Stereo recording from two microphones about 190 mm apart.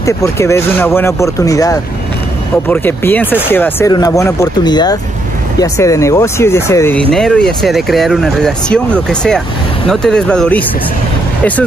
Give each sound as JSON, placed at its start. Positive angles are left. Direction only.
{"t": 0.0, "sound": "speech", "side_deg": 15}